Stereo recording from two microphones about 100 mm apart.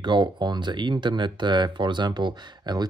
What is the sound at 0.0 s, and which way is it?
Speech, 50° right (ahead or behind).